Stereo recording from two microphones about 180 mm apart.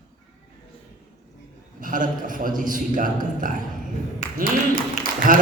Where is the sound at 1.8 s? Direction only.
50° right (ahead or behind).